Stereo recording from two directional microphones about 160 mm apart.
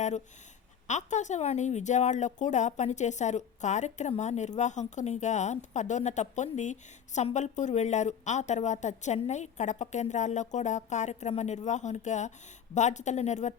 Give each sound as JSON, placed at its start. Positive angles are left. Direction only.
{"t": 0.9, "sound": "speech", "side_deg": 50}